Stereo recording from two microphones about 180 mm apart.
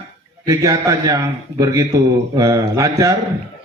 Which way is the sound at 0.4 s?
20° right (ahead or behind).